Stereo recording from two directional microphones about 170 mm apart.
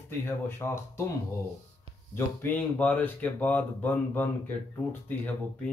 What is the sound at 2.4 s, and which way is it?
Speech, 10° left (ahead or behind).